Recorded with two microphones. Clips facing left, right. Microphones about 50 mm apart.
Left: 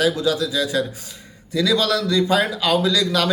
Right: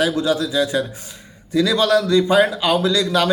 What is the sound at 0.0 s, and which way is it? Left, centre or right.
A man's voice, right.